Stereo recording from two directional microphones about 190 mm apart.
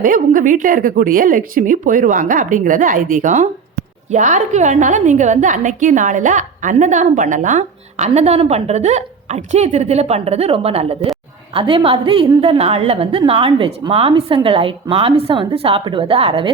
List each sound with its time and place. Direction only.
0.0 s a woman's voice: 45° right (ahead or behind); by 16.5 s 30° right (ahead or behind)